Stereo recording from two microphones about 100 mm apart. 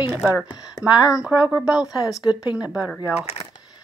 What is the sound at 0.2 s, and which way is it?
Speech, 15° right (ahead or behind).